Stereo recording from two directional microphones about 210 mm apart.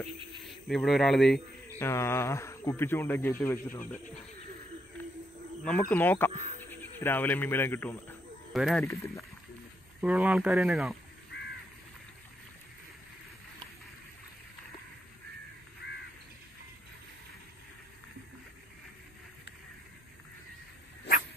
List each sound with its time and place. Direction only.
0.5 s speech: centre (ahead or behind)
1.8 s speech: 10° left (ahead or behind)
5.7 s speech: 10° left (ahead or behind)
10.0 s speech: 5° right (ahead or behind)
15.8 s crow: 50° left (ahead or behind)